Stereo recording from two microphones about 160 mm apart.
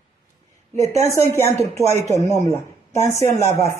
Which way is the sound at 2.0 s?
45° right (ahead or behind).